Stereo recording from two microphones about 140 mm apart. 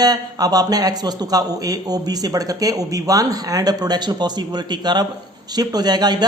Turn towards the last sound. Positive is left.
turn(degrees=-30)  # may be behind; listen again after turning